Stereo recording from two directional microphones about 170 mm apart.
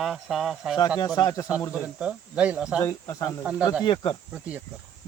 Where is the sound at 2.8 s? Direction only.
20° left (ahead or behind).